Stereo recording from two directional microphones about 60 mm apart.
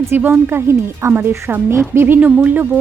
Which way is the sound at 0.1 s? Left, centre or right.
Right.